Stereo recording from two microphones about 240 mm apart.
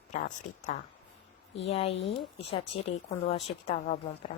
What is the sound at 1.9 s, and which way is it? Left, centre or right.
Speech, left.